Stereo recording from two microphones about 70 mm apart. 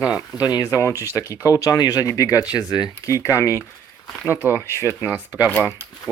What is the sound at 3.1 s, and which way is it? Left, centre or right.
Speech, left.